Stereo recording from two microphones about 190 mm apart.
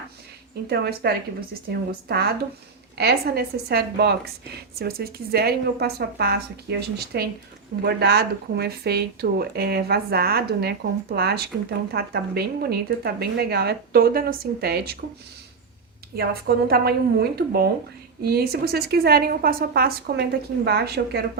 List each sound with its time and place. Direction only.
0.7 s a woman's voice: 55° right (ahead or behind)
16.1 s a woman's voice: 55° right (ahead or behind)